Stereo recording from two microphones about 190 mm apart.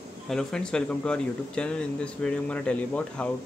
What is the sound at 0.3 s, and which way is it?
Speech, 5° left (ahead or behind).